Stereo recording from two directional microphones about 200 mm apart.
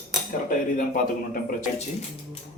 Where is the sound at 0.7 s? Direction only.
40° left (ahead or behind).